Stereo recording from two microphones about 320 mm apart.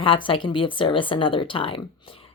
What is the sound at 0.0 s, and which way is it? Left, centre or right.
Speech, centre.